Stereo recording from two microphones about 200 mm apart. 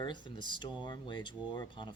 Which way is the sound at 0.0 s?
25° left (ahead or behind).